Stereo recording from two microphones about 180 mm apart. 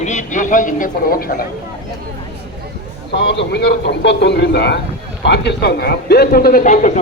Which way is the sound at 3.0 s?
70° left (ahead or behind).